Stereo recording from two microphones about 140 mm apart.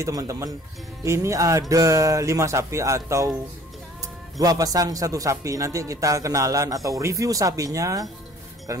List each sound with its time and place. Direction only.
0.0 s speech: 25° right (ahead or behind)
4.4 s speech: 25° right (ahead or behind)